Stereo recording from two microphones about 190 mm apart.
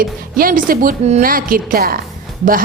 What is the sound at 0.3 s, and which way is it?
A woman's voice, 50° right (ahead or behind).